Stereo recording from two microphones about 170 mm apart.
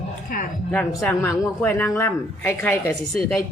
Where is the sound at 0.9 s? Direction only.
15° left (ahead or behind).